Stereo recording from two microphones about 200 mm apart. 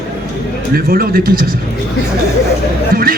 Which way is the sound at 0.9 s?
45° right (ahead or behind).